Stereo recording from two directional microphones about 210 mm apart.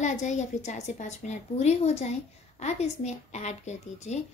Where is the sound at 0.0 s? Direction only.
35° left (ahead or behind).